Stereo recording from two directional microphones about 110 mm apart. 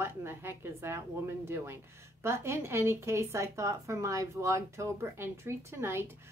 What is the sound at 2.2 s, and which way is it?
A woman's voice, 25° right (ahead or behind).